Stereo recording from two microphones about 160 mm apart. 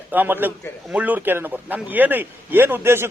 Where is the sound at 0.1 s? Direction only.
10° right (ahead or behind).